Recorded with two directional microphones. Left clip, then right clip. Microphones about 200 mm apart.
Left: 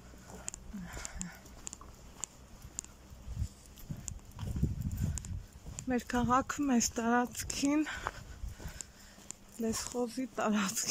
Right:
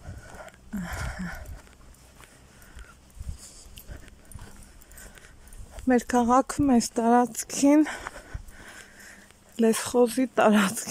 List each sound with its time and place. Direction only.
0.7 s a sound: 40° right (ahead or behind)
5.9 s speech: 30° right (ahead or behind)
9.6 s speech: 45° right (ahead or behind)